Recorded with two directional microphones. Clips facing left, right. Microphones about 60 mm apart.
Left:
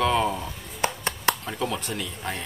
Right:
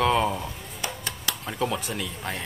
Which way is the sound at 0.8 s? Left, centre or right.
Left.